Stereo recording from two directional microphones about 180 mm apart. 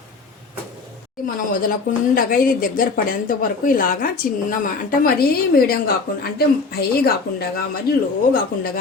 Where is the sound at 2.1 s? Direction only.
50° left (ahead or behind).